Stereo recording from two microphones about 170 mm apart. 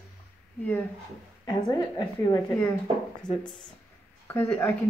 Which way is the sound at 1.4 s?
20° left (ahead or behind).